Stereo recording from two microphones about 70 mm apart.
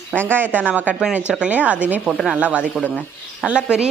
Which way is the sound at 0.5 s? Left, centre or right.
Right.